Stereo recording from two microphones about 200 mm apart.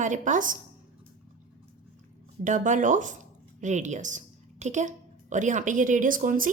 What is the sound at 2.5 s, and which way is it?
A woman's voice, 40° right (ahead or behind).